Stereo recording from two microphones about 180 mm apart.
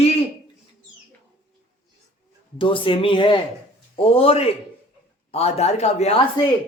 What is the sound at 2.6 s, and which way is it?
Speech, 30° left (ahead or behind).